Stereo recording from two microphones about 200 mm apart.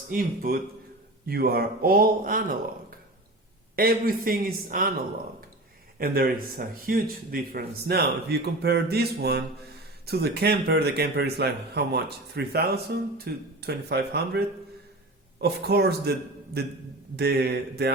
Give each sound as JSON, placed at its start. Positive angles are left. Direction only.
{"t": 0.1, "sound": "speech", "side_deg": -45}
{"t": 3.8, "sound": "speech", "side_deg": -50}
{"t": 6.0, "sound": "speech", "side_deg": -50}
{"t": 17.2, "sound": "speech", "side_deg": -55}